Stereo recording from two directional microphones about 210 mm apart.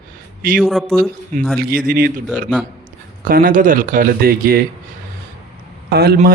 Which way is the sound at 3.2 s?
40° right (ahead or behind).